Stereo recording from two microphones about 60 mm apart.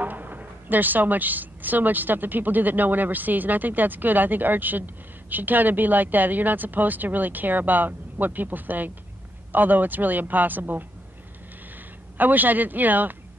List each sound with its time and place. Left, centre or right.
0.0 s a woman's voice: right
12.2 s a woman's voice: right